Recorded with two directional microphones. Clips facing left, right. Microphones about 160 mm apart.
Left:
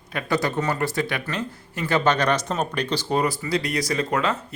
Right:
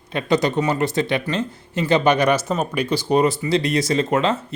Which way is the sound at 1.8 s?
10° right (ahead or behind).